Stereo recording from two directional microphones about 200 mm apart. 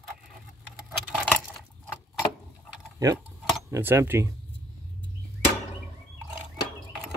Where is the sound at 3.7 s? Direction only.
10° right (ahead or behind).